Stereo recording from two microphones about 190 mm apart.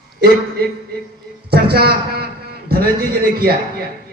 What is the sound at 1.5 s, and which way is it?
A man's voice, 55° right (ahead or behind).